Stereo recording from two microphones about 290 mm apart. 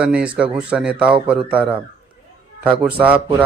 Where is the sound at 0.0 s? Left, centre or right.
Centre.